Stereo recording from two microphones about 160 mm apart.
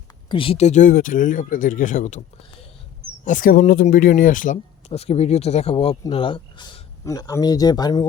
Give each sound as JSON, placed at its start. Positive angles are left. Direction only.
{"t": 0.3, "sound": "speech", "side_deg": 35}
{"t": 3.2, "sound": "speech", "side_deg": 55}
{"t": 4.5, "sound": "speech", "side_deg": 40}